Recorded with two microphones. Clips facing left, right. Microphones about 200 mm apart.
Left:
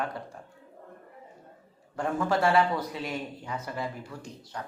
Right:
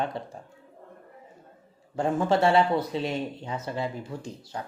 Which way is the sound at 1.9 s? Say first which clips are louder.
Right 4 dB; 25° right (ahead or behind).